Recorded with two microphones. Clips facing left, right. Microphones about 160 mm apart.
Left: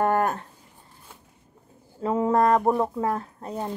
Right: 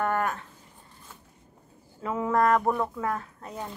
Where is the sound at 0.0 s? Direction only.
35° left (ahead or behind).